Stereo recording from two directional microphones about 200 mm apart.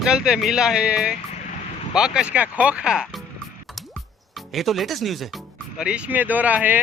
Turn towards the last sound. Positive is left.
turn(degrees=-10)  # may be behind; listen again after turning